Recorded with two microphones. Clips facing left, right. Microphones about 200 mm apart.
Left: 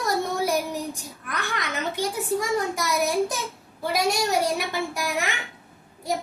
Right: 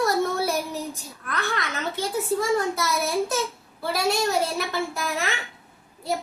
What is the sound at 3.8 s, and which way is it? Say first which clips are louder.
A child's voice: even; 15° left (ahead or behind).